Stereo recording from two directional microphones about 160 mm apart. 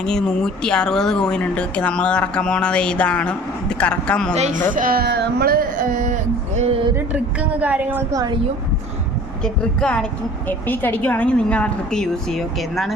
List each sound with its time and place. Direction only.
0.0 s speech: 5° left (ahead or behind)
4.4 s speech: 45° right (ahead or behind)
4.7 s speech: 65° right (ahead or behind)
6.6 s a sound: 35° right (ahead or behind)
7.6 s a woman's voice: 10° right (ahead or behind)
9.4 s a woman's voice: 5° left (ahead or behind)